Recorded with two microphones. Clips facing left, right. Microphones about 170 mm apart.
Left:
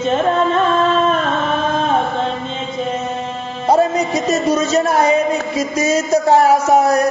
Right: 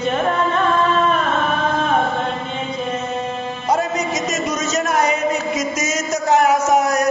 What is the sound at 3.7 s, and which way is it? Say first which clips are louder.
A man's voice: left 6 dB; 30° left (ahead or behind).